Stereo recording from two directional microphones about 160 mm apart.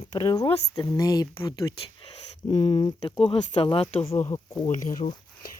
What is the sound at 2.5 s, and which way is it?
Speech, 40° left (ahead or behind).